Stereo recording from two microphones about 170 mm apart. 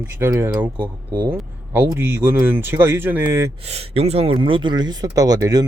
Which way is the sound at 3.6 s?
35° right (ahead or behind).